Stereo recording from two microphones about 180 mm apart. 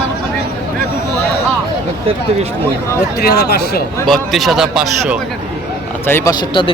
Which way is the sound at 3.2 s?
60° left (ahead or behind).